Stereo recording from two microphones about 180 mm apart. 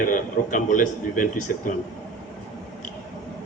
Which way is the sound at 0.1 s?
45° left (ahead or behind).